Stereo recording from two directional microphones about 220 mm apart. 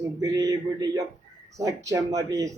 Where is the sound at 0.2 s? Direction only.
15° right (ahead or behind).